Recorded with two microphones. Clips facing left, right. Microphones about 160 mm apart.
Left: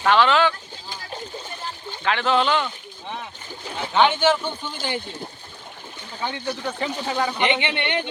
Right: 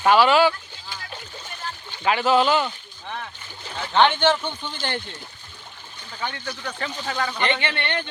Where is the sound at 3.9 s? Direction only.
5° left (ahead or behind).